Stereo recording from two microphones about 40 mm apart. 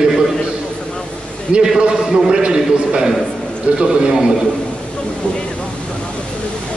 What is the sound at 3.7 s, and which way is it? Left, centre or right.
Speech, right.